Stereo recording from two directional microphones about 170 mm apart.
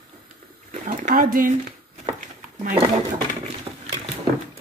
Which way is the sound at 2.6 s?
50° right (ahead or behind).